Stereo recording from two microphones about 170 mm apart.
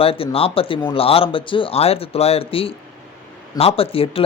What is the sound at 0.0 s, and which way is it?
A man's voice, 35° left (ahead or behind).